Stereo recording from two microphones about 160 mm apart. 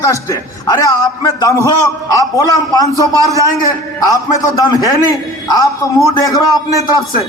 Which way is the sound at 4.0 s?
20° left (ahead or behind).